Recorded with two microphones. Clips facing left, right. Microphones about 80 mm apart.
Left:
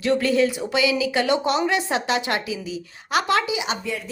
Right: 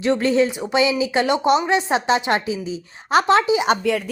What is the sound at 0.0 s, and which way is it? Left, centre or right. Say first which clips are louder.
Speech: right 2 dB; right.